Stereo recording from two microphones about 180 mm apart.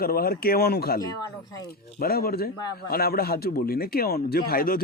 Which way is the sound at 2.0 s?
60° left (ahead or behind).